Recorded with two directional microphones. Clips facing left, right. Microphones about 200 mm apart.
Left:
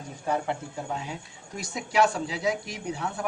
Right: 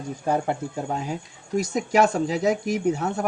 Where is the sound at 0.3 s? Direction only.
40° right (ahead or behind).